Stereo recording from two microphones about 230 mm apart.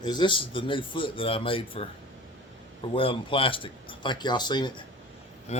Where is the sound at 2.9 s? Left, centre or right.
Left.